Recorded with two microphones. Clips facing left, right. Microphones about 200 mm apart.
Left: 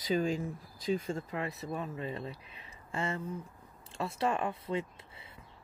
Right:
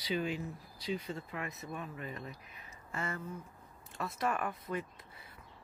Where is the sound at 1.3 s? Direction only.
30° left (ahead or behind).